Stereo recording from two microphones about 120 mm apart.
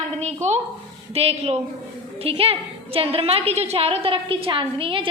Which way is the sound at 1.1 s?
60° right (ahead or behind).